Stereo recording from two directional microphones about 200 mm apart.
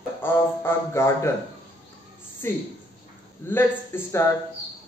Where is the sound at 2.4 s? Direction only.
15° left (ahead or behind).